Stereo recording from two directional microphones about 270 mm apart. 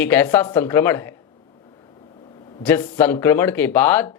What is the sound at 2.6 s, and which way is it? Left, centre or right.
Speech, centre.